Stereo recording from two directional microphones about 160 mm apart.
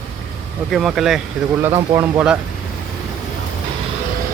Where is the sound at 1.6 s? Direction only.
20° right (ahead or behind).